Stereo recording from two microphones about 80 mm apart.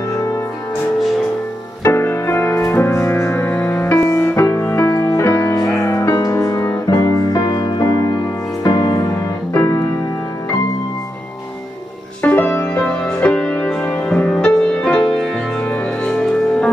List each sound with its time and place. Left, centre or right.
1.8 s music: left
9.5 s music: left
12.2 s music: left
12.7 s music: centre